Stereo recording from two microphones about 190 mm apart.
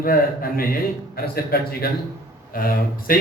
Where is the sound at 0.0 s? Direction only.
50° left (ahead or behind).